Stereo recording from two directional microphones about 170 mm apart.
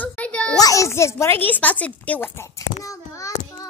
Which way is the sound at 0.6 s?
20° left (ahead or behind).